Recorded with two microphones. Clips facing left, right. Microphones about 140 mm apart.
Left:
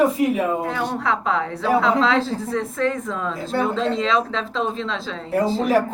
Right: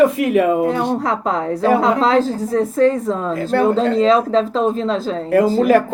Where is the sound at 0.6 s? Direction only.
40° right (ahead or behind).